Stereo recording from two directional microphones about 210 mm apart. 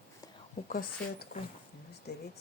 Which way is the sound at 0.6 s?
45° left (ahead or behind).